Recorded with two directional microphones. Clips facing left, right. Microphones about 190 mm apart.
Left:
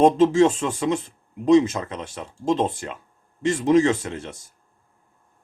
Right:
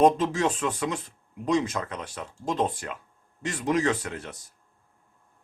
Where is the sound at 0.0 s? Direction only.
25° left (ahead or behind).